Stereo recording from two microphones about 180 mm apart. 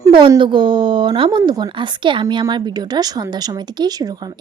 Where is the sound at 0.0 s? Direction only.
25° right (ahead or behind).